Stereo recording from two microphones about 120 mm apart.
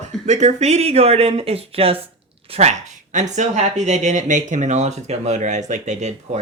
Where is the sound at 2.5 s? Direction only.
65° right (ahead or behind).